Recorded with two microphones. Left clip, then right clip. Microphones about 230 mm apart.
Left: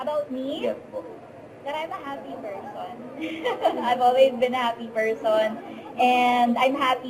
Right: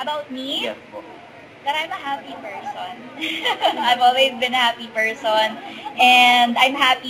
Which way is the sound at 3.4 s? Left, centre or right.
Centre.